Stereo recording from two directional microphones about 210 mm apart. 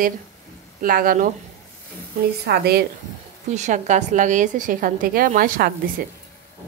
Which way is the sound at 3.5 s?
35° right (ahead or behind).